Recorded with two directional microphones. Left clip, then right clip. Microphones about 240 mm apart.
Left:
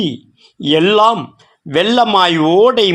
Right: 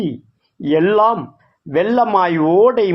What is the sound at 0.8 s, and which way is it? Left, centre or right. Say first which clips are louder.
A man's voice: left 3 dB; left.